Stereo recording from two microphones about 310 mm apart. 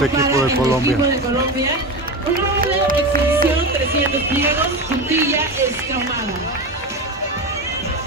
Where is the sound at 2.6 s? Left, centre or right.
Right.